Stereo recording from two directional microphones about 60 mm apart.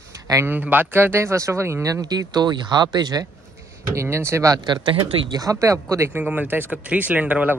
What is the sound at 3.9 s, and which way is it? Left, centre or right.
Speech, right.